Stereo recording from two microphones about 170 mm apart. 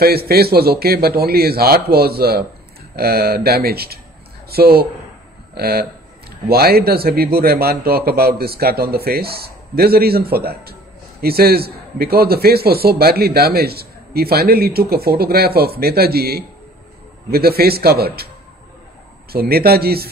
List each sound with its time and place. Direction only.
0.0 s a man's voice: 65° right (ahead or behind)
19.3 s a man's voice: 65° right (ahead or behind)